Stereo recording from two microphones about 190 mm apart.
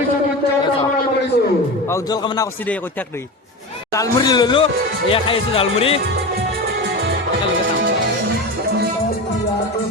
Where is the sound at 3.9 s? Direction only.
20° left (ahead or behind).